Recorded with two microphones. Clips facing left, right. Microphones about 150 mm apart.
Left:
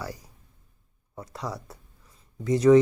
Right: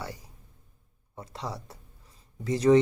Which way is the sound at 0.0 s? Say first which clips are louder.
Left 2 dB; 25° right (ahead or behind).